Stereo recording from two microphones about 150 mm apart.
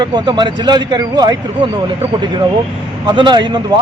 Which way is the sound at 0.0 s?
30° right (ahead or behind).